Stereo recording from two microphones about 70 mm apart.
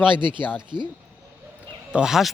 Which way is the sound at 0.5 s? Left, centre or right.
Right.